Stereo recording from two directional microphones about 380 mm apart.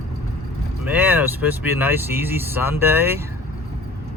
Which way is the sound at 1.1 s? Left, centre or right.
Centre.